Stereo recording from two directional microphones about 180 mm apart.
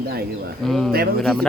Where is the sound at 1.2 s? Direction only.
5° left (ahead or behind).